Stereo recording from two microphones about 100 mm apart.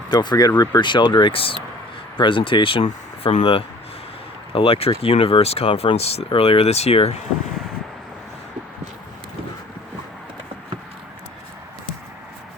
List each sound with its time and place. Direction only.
0.2 s speech: 45° left (ahead or behind); by 7.2 s 90° left